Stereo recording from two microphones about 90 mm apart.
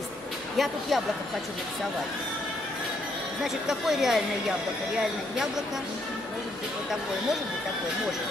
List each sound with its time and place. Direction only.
0.6 s a woman's voice: centre (ahead or behind)
3.6 s a woman's voice: 5° right (ahead or behind)